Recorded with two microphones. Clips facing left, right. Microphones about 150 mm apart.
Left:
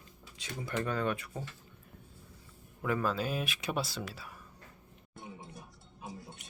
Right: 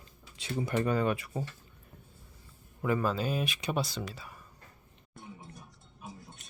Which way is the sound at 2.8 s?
Centre (ahead or behind).